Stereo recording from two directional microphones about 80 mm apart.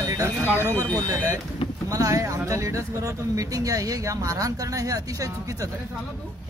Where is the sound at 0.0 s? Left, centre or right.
Right.